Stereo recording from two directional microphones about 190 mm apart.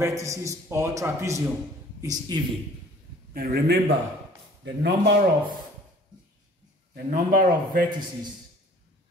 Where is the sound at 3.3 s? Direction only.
50° right (ahead or behind).